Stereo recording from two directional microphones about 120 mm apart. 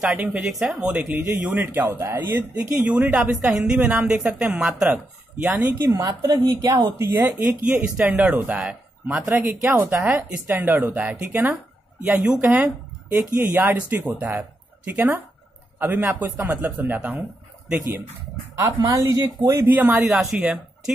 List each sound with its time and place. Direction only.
0.0 s a woman's voice: 10° right (ahead or behind)
5.9 s a woman's voice: 30° right (ahead or behind)
7.0 s a woman's voice: 15° right (ahead or behind)
18.9 s speech: 30° right (ahead or behind)
19.5 s a woman's voice: 15° right (ahead or behind)